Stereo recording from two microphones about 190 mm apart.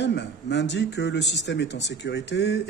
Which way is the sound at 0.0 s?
65° left (ahead or behind).